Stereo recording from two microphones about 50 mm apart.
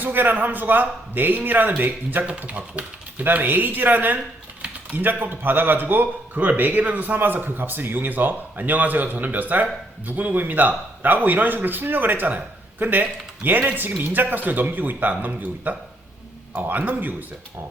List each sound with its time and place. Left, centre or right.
0.0 s a man's voice: right